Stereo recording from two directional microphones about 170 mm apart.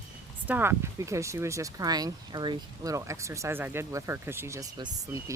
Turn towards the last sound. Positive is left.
turn(degrees=-20)  # may be behind; listen again after turning